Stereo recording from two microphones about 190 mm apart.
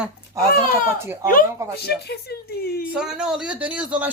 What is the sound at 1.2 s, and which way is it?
Speech, 50° left (ahead or behind).